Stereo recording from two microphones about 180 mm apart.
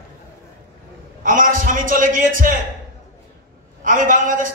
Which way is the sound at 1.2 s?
50° right (ahead or behind).